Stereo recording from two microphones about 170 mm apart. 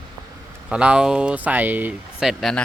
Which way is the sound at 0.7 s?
5° right (ahead or behind).